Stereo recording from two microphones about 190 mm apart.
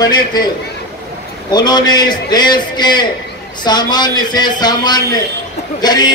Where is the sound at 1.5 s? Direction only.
20° left (ahead or behind).